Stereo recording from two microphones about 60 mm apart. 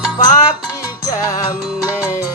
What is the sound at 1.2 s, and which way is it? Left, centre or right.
Music, left.